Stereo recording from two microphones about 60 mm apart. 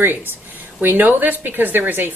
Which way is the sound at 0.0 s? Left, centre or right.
Right.